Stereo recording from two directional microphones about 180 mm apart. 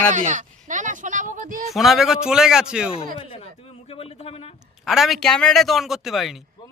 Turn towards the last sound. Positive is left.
turn(degrees=0)  # may be behind; listen again after turning